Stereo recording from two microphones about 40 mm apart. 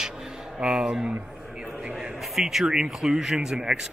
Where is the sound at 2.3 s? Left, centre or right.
Centre.